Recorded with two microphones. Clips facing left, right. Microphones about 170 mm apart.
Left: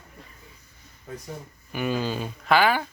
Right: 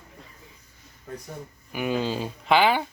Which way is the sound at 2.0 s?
25° right (ahead or behind).